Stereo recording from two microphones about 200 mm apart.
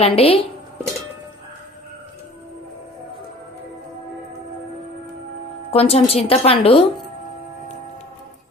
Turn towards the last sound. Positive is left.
turn(degrees=30)  # may be behind; listen again after turning